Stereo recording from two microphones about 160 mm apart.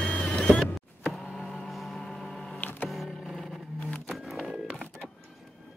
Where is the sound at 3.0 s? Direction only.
Centre (ahead or behind).